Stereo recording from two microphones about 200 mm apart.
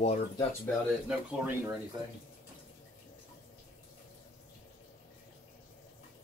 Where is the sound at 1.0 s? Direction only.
10° right (ahead or behind).